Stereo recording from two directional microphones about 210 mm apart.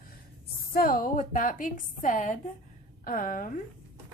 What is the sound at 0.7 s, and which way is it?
A woman's voice, 45° left (ahead or behind).